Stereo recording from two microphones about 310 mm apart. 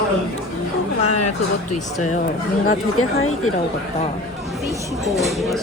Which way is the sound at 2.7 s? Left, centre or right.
Left.